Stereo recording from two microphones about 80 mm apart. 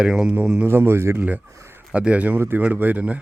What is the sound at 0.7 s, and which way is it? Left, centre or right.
Speech, right.